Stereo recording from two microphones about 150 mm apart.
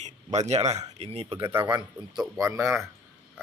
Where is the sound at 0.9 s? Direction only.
40° right (ahead or behind).